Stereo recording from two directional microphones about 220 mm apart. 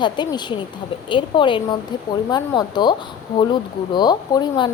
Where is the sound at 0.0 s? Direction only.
20° left (ahead or behind).